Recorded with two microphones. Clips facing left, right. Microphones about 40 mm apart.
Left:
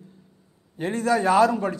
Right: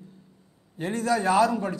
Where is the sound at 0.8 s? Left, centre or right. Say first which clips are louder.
Left 3 dB; left.